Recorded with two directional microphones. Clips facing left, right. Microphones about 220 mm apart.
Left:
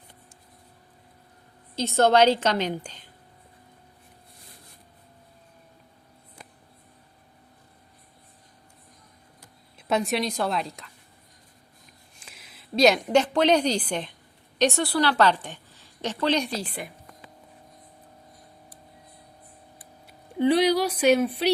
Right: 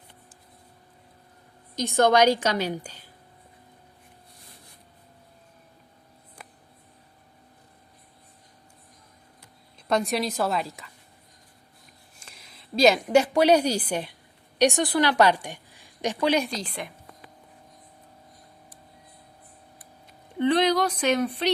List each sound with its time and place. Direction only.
1.7 s a woman's voice: 15° right (ahead or behind)
9.7 s a woman's voice: 5° left (ahead or behind)
12.2 s a woman's voice: centre (ahead or behind)
16.5 s a woman's voice: 5° left (ahead or behind)
20.1 s speech: 10° left (ahead or behind)